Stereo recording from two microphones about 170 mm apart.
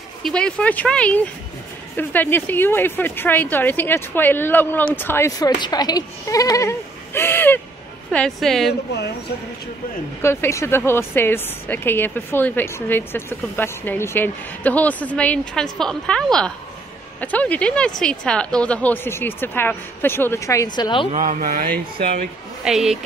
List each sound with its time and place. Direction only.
0.2 s a woman's voice: 5° left (ahead or behind)
10.2 s a woman's voice: 15° left (ahead or behind)
21.1 s speech: 50° right (ahead or behind)
22.7 s a woman's voice: centre (ahead or behind)